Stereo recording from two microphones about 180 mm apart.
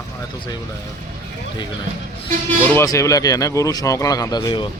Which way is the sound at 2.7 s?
15° left (ahead or behind).